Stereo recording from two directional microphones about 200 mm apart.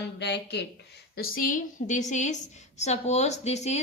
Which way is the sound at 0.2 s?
60° left (ahead or behind).